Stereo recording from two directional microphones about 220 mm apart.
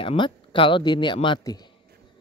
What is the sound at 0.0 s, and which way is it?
Speech, 25° left (ahead or behind).